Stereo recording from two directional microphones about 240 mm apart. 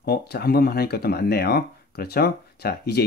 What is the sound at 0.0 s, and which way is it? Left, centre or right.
Speech, left.